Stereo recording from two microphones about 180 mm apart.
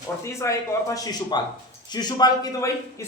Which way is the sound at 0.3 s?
15° left (ahead or behind).